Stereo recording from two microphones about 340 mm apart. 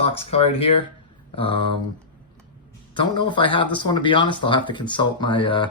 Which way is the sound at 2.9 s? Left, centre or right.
Centre.